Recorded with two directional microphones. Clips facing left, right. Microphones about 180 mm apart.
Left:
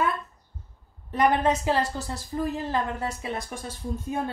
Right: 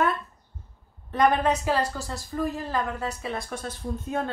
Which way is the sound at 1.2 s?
20° left (ahead or behind).